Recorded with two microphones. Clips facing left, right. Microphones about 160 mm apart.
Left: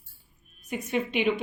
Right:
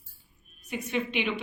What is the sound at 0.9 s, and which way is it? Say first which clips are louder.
Speech: left 4 dB; 45° left (ahead or behind).